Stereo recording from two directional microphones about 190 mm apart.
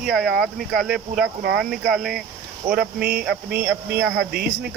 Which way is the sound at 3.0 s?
50° right (ahead or behind).